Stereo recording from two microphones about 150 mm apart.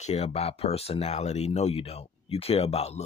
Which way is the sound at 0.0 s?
45° left (ahead or behind).